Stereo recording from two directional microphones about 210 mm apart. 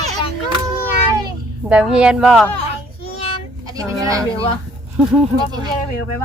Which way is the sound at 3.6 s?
15° right (ahead or behind).